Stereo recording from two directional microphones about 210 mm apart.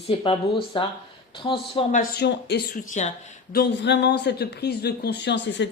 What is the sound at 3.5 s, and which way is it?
A woman's voice, 55° left (ahead or behind).